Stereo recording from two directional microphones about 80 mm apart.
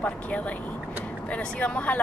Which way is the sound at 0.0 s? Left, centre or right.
Centre.